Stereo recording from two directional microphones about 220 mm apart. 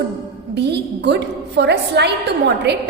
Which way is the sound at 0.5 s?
50° right (ahead or behind).